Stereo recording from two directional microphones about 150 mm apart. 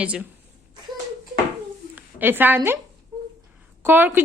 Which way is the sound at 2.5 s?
20° right (ahead or behind).